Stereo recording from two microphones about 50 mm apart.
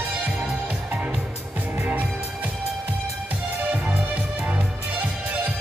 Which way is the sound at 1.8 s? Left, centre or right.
Right.